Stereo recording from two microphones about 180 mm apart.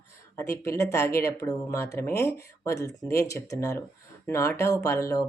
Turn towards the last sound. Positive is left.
turn(degrees=15)  # may be behind; listen again after turning